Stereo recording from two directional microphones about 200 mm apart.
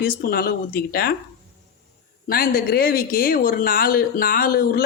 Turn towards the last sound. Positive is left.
turn(degrees=50)  # may be behind; listen again after turning